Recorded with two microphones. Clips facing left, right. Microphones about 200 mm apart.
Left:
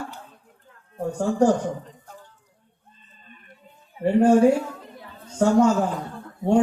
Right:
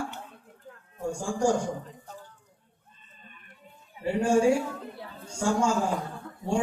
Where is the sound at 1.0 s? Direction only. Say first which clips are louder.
Left 6 dB; 10° right (ahead or behind).